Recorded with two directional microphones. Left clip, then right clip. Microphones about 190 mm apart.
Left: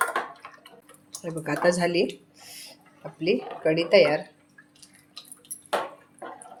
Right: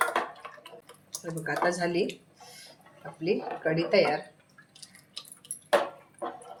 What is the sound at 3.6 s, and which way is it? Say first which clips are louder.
Speech: left 6 dB; 50° left (ahead or behind).